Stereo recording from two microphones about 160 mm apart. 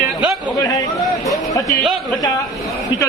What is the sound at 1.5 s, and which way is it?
Speech, 20° left (ahead or behind).